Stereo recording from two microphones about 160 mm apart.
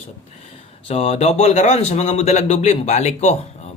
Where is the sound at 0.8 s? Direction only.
40° left (ahead or behind).